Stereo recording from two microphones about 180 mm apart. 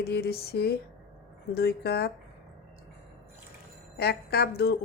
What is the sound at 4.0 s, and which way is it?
Speech, 60° left (ahead or behind).